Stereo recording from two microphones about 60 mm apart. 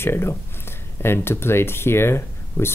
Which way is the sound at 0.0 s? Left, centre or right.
Left.